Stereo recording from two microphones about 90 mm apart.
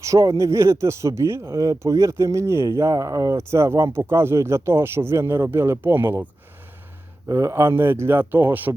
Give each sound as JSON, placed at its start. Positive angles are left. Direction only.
{"t": 0.0, "sound": "speech", "side_deg": -35}
{"t": 7.3, "sound": "speech", "side_deg": -30}